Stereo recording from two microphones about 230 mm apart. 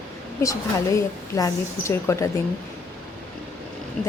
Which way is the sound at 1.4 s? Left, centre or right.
Centre.